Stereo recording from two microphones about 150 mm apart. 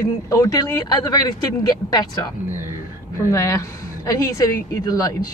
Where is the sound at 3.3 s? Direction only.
20° left (ahead or behind).